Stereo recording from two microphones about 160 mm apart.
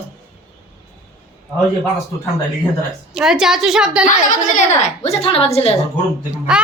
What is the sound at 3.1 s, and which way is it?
Speech, 5° right (ahead or behind).